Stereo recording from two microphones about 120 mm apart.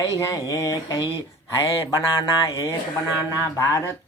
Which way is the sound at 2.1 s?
30° left (ahead or behind).